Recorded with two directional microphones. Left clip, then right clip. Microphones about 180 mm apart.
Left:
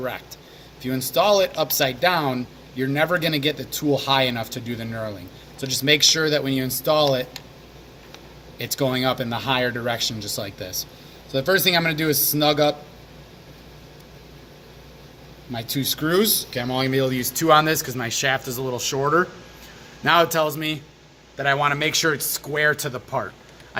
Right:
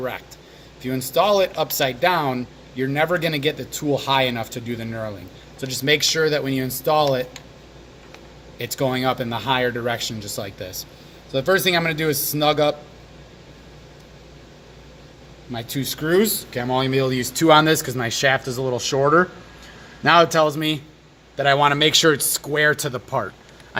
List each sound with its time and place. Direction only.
0.8 s a man's voice: 20° right (ahead or behind)
8.5 s a man's voice: 25° right (ahead or behind)
15.8 s a man's voice: 25° right (ahead or behind)
16.6 s speech: 35° right (ahead or behind); by 23.3 s 55° right (ahead or behind)